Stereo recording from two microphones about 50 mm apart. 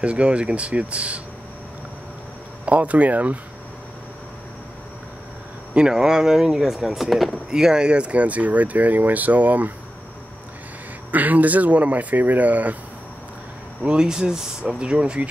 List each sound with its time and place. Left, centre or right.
0.0 s speech: right
2.6 s speech: right
5.8 s speech: centre
7.5 s speech: centre; by 9.7 s right
11.1 s speech: right
13.8 s speech: centre